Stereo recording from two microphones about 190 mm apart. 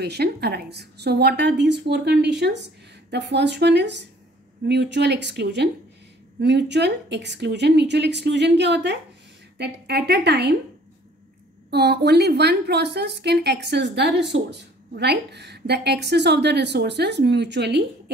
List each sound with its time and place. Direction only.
0.0 s a woman's voice: 60° right (ahead or behind)
11.7 s a woman's voice: 60° right (ahead or behind)